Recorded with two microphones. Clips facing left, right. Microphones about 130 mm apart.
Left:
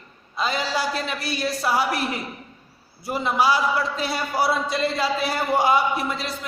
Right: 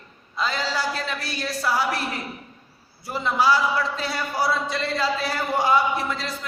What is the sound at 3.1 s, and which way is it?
A man's voice, 15° left (ahead or behind).